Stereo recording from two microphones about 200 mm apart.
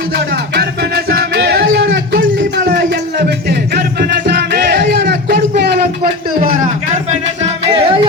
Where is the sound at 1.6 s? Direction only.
75° right (ahead or behind).